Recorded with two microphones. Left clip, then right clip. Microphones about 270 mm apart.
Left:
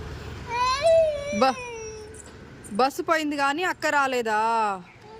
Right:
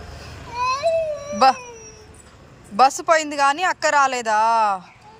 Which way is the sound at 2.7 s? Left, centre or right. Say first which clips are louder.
Right 7 dB; centre.